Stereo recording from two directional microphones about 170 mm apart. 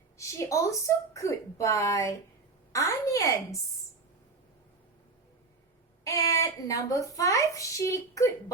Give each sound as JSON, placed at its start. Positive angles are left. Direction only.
{"t": 0.2, "sound": "a child's voice", "side_deg": 20}
{"t": 6.1, "sound": "a child's voice", "side_deg": 20}